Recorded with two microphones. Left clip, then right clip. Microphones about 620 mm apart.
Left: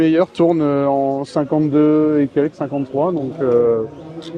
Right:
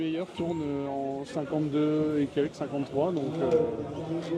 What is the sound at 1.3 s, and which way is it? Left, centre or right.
Speech, left.